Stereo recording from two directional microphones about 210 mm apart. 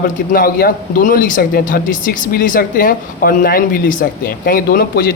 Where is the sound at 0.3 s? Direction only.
45° left (ahead or behind).